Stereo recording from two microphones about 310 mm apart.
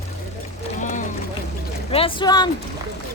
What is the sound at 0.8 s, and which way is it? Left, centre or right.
Music, left.